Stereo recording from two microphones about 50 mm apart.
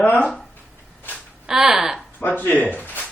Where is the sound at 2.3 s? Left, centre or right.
Left.